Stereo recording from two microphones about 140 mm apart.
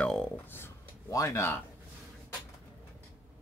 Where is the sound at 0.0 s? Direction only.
5° left (ahead or behind).